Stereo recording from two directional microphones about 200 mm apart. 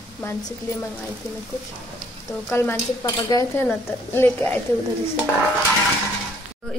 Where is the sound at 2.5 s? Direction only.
10° left (ahead or behind).